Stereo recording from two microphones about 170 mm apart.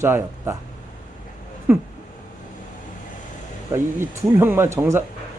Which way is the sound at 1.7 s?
10° right (ahead or behind).